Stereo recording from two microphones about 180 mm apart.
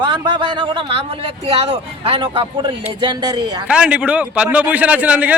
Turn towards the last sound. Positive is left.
turn(degrees=-10)  # may be behind; listen again after turning